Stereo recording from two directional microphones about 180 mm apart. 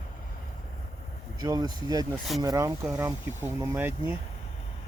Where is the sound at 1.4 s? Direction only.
20° right (ahead or behind).